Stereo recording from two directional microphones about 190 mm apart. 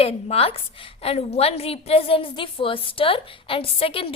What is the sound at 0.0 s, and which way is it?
A woman's voice, 30° left (ahead or behind).